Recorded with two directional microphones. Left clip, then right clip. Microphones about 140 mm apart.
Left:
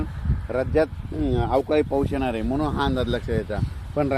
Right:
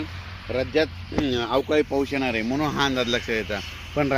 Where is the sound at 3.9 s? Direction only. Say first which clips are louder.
Even; 5° left (ahead or behind).